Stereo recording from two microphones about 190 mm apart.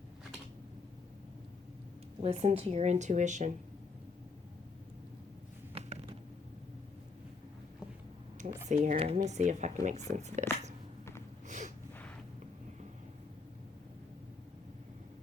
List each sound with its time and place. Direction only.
2.2 s speech: 30° right (ahead or behind)
5.7 s a sound: 30° right (ahead or behind)
8.6 s speech: 40° right (ahead or behind)
11.4 s snort: 40° right (ahead or behind)